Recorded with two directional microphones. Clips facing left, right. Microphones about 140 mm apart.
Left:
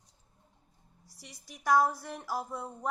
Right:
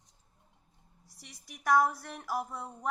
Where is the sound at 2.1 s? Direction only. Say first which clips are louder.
Even; 5° left (ahead or behind).